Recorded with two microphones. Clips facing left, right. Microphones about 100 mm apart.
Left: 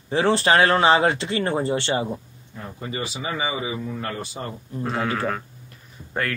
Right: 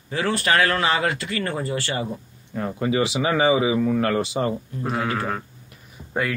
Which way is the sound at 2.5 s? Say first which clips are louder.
Right 9 dB; 90° right.